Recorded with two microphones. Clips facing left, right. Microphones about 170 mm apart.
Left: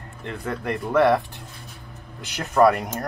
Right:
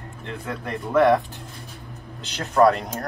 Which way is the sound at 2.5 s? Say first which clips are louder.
Even; 15° left (ahead or behind).